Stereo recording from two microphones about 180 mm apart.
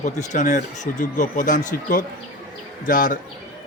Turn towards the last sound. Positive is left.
turn(degrees=50)  # may be behind; listen again after turning